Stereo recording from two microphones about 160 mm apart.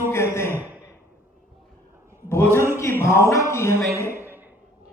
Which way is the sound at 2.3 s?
15° left (ahead or behind).